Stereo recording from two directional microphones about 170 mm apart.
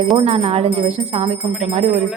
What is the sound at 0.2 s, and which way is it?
Jingle bell, 35° right (ahead or behind).